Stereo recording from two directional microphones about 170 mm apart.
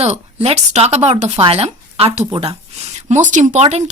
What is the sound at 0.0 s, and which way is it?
Speech, 35° right (ahead or behind).